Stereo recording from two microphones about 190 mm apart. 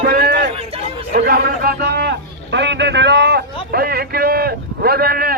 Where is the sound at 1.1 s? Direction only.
60° right (ahead or behind).